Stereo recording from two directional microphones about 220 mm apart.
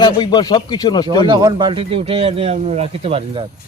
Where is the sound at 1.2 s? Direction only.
20° right (ahead or behind).